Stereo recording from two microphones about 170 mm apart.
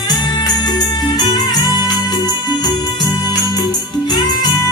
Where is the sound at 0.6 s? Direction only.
25° left (ahead or behind).